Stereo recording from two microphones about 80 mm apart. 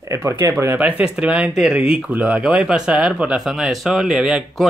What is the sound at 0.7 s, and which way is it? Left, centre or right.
Speech, centre.